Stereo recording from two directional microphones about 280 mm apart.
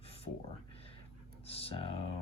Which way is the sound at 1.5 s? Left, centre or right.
Centre.